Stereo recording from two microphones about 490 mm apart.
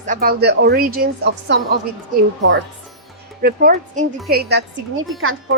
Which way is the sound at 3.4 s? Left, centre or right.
Centre.